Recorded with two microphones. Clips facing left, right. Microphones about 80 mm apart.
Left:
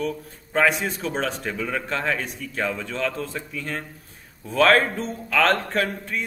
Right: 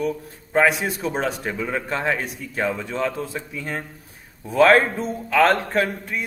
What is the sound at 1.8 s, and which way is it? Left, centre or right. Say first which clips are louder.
A man's voice: right 2 dB; centre.